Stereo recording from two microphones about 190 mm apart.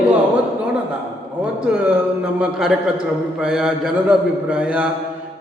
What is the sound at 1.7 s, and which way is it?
A man's voice, 5° right (ahead or behind).